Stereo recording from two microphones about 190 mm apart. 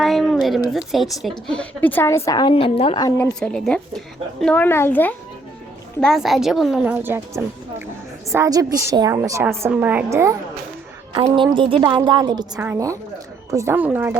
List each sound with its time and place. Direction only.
0.0 s a sound: centre (ahead or behind)
0.4 s speech: centre (ahead or behind); by 3.2 s 20° left (ahead or behind)
3.4 s a woman's voice: 5° left (ahead or behind); by 10.3 s 15° right (ahead or behind)
11.1 s a woman's voice: 25° right (ahead or behind)
12.5 s a woman's voice: 10° right (ahead or behind)